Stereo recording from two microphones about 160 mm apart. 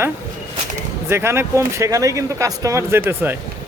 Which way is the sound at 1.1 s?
15° right (ahead or behind).